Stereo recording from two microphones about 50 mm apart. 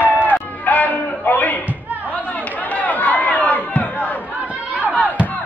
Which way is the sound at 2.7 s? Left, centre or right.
Left.